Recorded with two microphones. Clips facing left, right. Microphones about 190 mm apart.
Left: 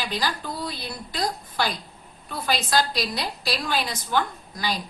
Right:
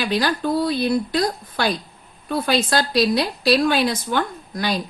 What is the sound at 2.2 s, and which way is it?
A woman's voice, 60° right (ahead or behind).